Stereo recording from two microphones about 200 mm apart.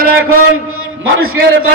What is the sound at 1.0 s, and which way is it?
Speech, 90° right.